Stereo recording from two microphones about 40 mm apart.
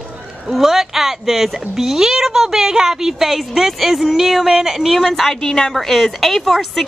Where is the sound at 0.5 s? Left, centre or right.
Centre.